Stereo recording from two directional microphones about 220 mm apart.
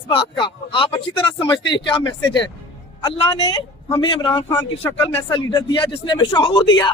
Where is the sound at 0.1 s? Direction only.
20° left (ahead or behind).